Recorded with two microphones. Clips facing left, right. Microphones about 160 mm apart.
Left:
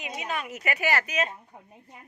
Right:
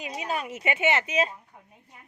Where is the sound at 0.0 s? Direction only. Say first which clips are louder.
Right 2 dB; 35° right (ahead or behind).